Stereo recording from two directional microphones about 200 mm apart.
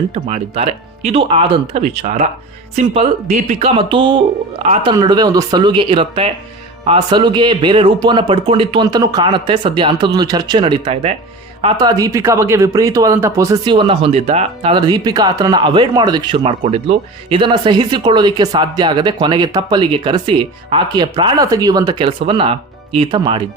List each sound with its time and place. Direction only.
0.1 s speech: 35° right (ahead or behind)